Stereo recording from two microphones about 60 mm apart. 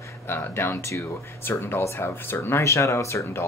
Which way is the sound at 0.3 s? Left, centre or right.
Left.